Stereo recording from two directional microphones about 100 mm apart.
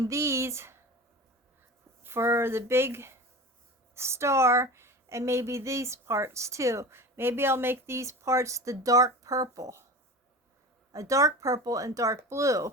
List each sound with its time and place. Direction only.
0.0 s speech: 30° right (ahead or behind)
2.0 s speech: 25° right (ahead or behind)
10.9 s speech: 35° right (ahead or behind)